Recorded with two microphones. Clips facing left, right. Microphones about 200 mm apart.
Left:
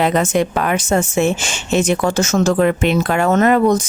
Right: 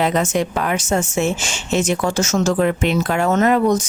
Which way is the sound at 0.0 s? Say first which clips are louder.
Left 3 dB; 60° left (ahead or behind).